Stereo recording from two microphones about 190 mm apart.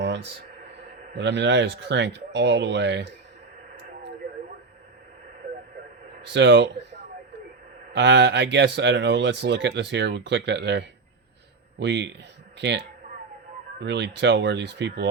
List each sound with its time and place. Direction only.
0.0 s a sound: 70° right (ahead or behind)
1.1 s speech: 70° right (ahead or behind)
6.2 s speech: 70° right (ahead or behind)
7.9 s speech: 70° right (ahead or behind)